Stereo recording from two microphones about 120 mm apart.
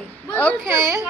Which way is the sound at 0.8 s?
25° right (ahead or behind).